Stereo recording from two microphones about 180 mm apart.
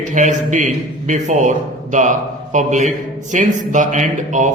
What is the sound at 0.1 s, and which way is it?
A man's voice, 45° right (ahead or behind).